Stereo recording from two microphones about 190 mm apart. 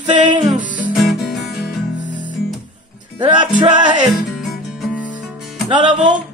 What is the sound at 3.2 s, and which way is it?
Speech, 25° right (ahead or behind).